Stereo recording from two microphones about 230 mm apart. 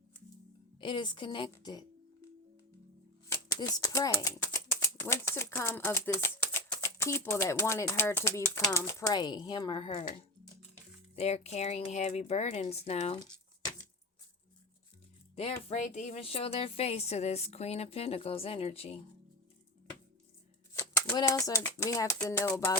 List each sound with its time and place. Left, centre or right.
0.8 s speech: left
3.5 s speech: centre
11.1 s speech: left
15.4 s speech: left
20.7 s speech: centre